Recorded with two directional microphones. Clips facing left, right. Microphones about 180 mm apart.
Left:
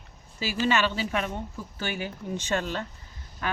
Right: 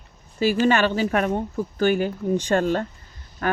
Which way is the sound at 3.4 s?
50° right (ahead or behind).